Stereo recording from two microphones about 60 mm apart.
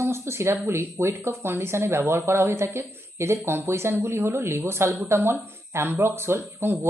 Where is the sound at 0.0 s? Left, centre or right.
Right.